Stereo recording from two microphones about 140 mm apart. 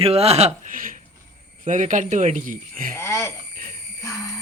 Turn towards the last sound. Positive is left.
turn(degrees=20)  # may be behind; listen again after turning